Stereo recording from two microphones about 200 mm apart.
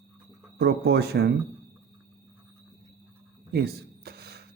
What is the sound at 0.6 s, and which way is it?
Speech, 55° right (ahead or behind).